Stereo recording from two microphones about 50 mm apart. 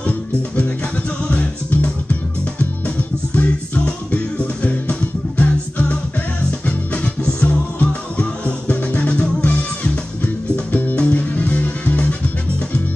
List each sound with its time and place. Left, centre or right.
0.0 s music: left
3.3 s music: left